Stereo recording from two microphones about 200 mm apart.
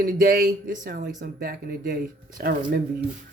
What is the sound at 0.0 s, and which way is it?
Speech, 45° right (ahead or behind).